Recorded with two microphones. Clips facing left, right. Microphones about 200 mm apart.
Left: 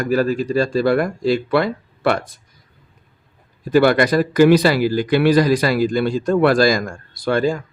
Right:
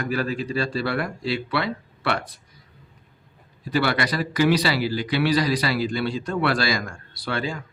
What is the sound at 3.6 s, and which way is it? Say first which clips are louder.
Speech: left 9 dB; 45° left (ahead or behind).